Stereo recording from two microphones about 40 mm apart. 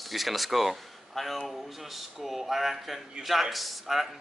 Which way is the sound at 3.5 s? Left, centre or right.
Centre.